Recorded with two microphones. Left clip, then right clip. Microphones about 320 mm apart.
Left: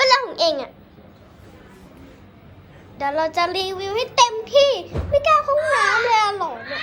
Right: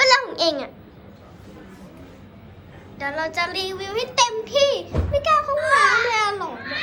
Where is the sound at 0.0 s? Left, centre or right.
Centre.